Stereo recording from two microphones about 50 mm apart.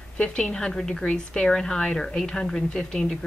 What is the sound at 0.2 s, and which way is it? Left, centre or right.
A woman's voice, centre.